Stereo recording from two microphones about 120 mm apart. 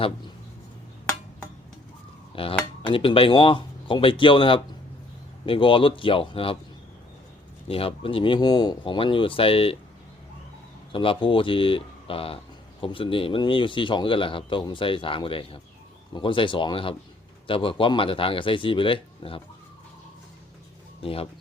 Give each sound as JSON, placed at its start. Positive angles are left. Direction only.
{"t": 2.3, "sound": "cutlery", "side_deg": 50}
{"t": 2.8, "sound": "a man's voice", "side_deg": 45}
{"t": 7.7, "sound": "a man's voice", "side_deg": 50}
{"t": 10.9, "sound": "a man's voice", "side_deg": 45}
{"t": 21.0, "sound": "a man's voice", "side_deg": 55}